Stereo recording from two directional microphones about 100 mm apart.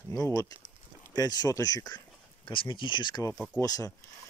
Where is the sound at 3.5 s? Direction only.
35° left (ahead or behind).